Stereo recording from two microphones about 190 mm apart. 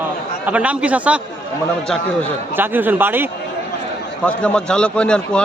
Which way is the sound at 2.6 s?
10° right (ahead or behind).